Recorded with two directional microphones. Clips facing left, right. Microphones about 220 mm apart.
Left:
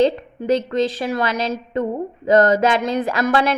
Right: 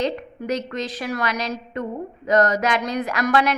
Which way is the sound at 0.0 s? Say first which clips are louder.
Left 7 dB; 25° left (ahead or behind).